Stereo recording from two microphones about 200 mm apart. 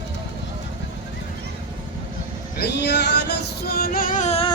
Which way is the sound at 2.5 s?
55° left (ahead or behind).